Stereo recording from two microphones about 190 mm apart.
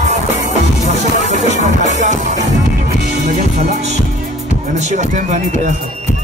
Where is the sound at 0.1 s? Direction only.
40° right (ahead or behind).